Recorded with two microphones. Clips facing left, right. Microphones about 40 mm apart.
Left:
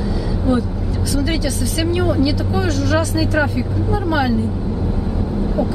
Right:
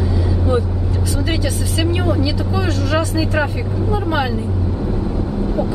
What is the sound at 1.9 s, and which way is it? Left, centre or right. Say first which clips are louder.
Speech: left 3 dB; right.